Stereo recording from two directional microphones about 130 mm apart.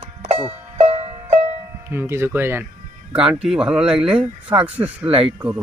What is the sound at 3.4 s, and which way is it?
Speech, 5° right (ahead or behind).